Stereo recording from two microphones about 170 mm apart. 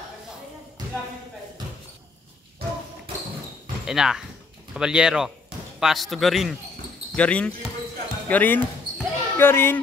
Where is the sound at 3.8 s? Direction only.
5° right (ahead or behind); by 9.8 s 15° left (ahead or behind).